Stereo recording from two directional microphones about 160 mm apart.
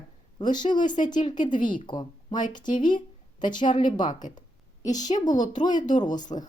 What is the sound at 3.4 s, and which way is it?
A woman's voice, 30° left (ahead or behind).